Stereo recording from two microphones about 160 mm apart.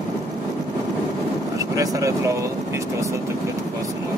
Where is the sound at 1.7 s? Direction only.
20° right (ahead or behind).